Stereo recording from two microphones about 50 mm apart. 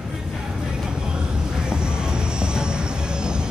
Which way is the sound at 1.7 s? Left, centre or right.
Centre.